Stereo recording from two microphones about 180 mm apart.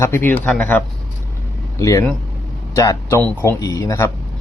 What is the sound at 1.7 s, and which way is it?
A man's voice, 15° left (ahead or behind).